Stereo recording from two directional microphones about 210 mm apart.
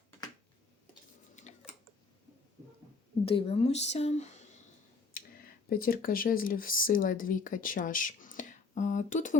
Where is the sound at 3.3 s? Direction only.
25° left (ahead or behind).